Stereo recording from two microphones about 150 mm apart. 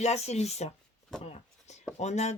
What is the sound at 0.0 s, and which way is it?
Speech, 45° left (ahead or behind).